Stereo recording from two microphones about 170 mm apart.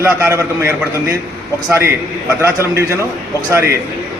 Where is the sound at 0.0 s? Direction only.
15° right (ahead or behind).